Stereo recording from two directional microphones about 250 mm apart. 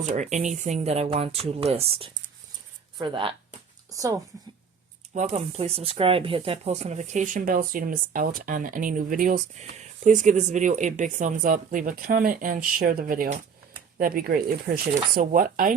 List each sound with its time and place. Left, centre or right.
0.1 s speech: right
5.1 s speech: right